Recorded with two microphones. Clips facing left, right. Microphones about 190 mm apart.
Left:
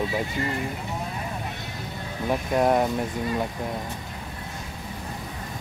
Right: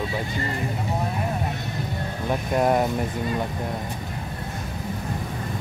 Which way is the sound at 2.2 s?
Centre (ahead or behind).